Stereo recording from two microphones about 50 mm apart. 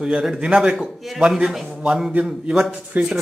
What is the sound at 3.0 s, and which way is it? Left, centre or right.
Speech, right.